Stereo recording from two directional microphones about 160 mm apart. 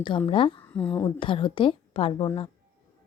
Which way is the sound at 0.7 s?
10° left (ahead or behind).